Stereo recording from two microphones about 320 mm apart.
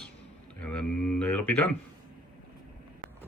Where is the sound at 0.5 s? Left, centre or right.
Centre.